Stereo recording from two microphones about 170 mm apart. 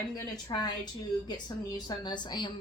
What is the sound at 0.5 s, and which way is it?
A woman's voice, 25° left (ahead or behind).